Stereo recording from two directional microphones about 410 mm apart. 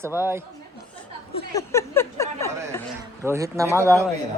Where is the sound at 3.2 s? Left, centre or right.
Centre.